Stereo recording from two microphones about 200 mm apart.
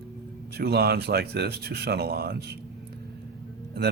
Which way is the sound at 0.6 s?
50° right (ahead or behind).